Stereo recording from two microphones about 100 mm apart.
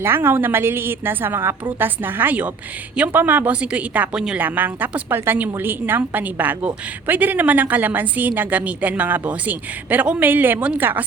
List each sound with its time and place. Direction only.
0.0 s a woman's voice: 25° right (ahead or behind)